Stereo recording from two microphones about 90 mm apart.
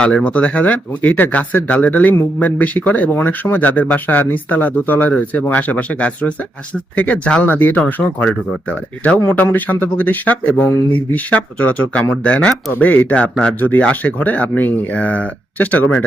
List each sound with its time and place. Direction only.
0.0 s speech: 10° left (ahead or behind)